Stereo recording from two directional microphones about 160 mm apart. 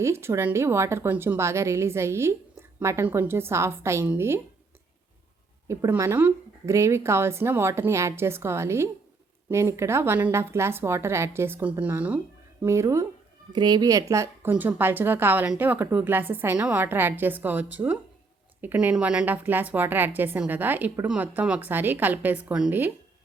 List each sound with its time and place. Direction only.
0.0 s a woman's voice: 15° right (ahead or behind)
5.6 s a woman's voice: 20° right (ahead or behind)